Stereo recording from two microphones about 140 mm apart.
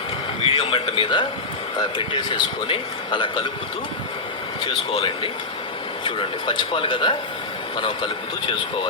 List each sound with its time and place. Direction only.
0.4 s a man's voice: 40° left (ahead or behind)
4.6 s a man's voice: 35° left (ahead or behind)